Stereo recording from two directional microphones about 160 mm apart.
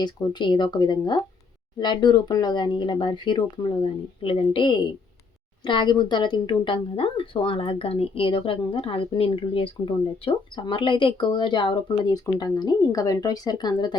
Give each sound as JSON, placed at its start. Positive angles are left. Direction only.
{"t": 0.0, "sound": "a woman's voice", "side_deg": 30}